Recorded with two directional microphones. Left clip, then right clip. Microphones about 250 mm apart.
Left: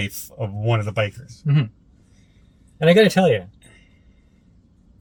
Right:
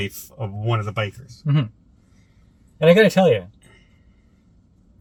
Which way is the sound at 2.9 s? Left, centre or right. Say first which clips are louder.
Right 1 dB; centre.